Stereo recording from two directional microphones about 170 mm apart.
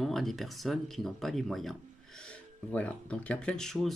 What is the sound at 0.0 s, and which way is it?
Speech, centre (ahead or behind).